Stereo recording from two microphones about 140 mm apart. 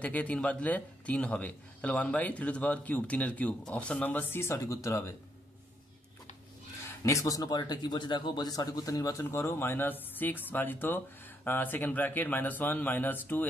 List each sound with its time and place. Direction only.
0.0 s a man's voice: 10° left (ahead or behind)
7.0 s a man's voice: 20° left (ahead or behind)